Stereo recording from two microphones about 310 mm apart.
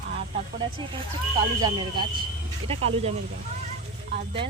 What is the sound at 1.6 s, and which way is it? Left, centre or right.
Speech, centre.